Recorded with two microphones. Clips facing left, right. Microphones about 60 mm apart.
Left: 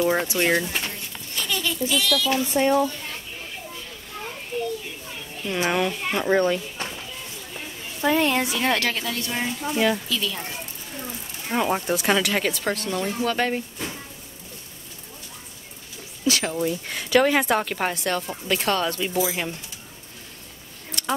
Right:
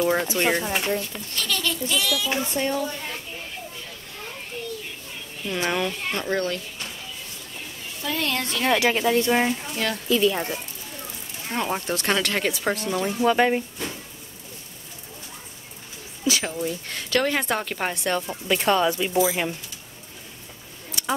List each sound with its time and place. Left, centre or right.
0.0 s speech: centre
2.5 s speech: left
4.5 s children playing: centre
5.4 s a child's voice: centre
6.2 s speech: centre
8.0 s a child's voice: left; by 8.7 s centre
8.7 s speech: centre
9.0 s speech: right
11.4 s speech: centre
13.2 s speech: centre
16.3 s a sound: centre
16.6 s speech: centre
21.0 s a sound: centre